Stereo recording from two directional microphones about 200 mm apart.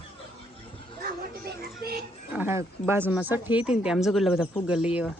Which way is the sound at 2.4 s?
10° right (ahead or behind).